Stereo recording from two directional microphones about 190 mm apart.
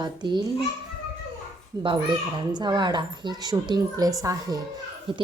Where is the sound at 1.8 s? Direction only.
25° right (ahead or behind).